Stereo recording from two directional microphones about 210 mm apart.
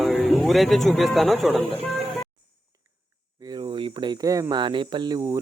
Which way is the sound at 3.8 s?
20° right (ahead or behind).